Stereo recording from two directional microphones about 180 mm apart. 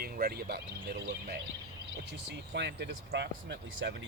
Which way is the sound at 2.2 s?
75° right (ahead or behind).